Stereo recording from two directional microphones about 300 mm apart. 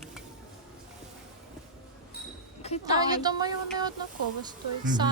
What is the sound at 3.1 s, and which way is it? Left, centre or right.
Music, centre.